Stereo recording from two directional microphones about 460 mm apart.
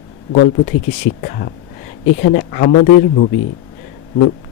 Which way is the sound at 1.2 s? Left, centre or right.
Centre.